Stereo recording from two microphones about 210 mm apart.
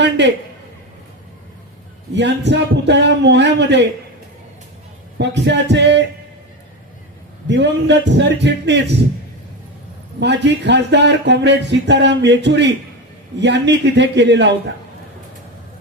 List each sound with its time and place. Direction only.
0.0 s speech: 55° right (ahead or behind)
2.1 s speech: 55° right (ahead or behind)
5.1 s speech: 55° right (ahead or behind)
7.4 s speech: 55° right (ahead or behind)
10.2 s speech: 55° right (ahead or behind)